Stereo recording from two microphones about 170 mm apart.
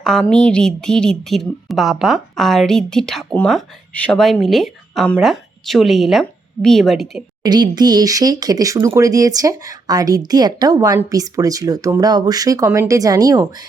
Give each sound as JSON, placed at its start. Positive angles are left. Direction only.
{"t": 0.0, "sound": "a woman's voice", "side_deg": 0}
{"t": 7.4, "sound": "speech", "side_deg": -25}